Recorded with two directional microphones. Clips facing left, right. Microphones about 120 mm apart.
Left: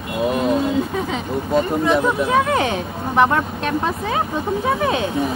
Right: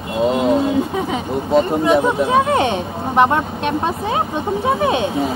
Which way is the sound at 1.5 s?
25° right (ahead or behind).